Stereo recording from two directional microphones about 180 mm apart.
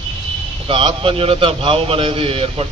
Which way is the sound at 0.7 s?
30° right (ahead or behind).